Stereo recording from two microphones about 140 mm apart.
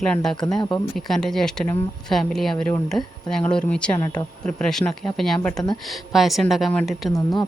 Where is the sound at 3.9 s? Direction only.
25° left (ahead or behind).